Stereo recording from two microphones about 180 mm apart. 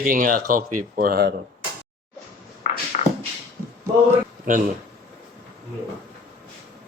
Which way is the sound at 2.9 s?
40° left (ahead or behind).